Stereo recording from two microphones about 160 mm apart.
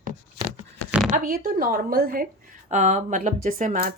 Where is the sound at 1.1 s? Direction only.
60° right (ahead or behind).